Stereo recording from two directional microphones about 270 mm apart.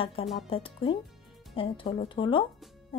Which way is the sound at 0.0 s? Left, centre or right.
Left.